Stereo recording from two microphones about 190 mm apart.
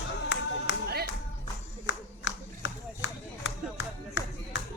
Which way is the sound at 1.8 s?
75° left (ahead or behind).